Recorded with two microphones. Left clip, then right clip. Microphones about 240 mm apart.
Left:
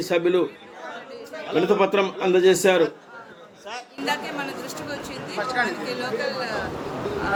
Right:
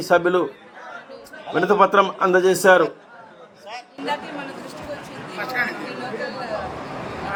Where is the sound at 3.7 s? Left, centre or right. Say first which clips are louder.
Even; centre.